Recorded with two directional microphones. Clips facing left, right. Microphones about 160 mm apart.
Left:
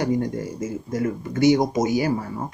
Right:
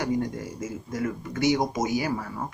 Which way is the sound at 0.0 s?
35° left (ahead or behind).